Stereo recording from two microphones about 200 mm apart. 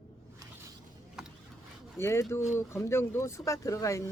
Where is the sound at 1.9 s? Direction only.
15° left (ahead or behind).